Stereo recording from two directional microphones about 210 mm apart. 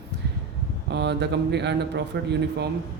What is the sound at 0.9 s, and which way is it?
A man's voice, 55° right (ahead or behind).